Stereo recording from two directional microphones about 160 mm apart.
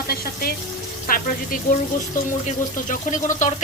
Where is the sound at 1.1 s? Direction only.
65° left (ahead or behind).